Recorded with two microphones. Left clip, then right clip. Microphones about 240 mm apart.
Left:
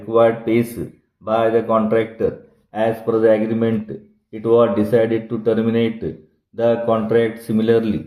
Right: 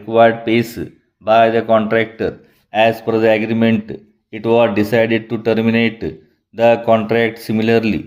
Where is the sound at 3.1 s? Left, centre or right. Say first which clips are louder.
Right 1 dB; right.